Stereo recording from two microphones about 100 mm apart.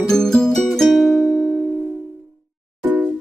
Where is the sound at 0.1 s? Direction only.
5° left (ahead or behind).